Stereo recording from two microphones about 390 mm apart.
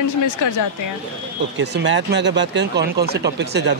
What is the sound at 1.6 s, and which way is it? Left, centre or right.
Speech, right.